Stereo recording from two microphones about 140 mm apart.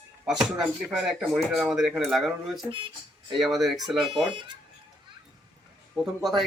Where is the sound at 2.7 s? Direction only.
35° right (ahead or behind).